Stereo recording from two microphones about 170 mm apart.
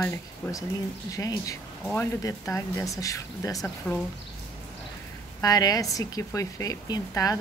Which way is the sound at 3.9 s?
10° left (ahead or behind).